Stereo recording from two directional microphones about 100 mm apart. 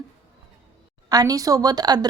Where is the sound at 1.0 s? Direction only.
40° right (ahead or behind).